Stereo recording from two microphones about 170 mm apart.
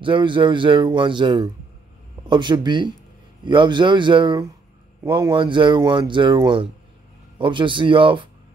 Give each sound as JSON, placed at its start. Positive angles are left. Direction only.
{"t": 0.0, "sound": "speech", "side_deg": -30}